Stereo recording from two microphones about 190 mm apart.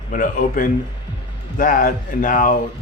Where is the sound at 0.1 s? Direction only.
45° left (ahead or behind).